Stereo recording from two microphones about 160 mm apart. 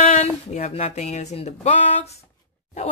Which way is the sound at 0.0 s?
45° left (ahead or behind).